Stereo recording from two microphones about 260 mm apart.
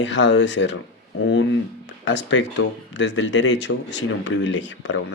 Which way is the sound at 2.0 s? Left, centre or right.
Left.